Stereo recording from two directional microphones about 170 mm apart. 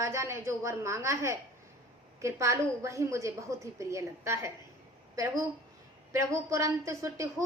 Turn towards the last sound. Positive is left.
turn(degrees=-20)  # may be behind; listen again after turning